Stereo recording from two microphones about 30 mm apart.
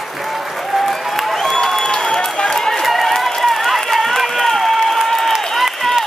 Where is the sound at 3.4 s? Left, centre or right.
Centre.